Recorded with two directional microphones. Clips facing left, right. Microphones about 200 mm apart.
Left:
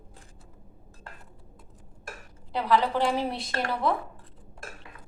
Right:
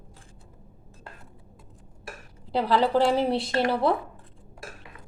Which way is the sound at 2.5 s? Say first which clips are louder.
Right 3 dB; 30° right (ahead or behind).